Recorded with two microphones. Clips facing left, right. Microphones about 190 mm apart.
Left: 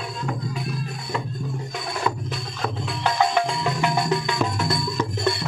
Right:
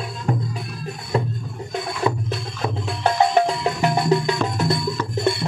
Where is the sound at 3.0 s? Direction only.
40° right (ahead or behind).